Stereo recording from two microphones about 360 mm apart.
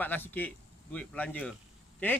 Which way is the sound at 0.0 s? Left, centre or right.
Centre.